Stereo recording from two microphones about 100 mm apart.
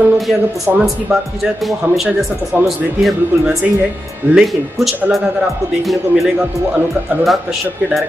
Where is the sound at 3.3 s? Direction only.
20° right (ahead or behind).